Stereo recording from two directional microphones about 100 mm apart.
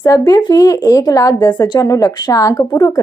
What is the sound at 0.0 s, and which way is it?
A woman's voice, 40° left (ahead or behind).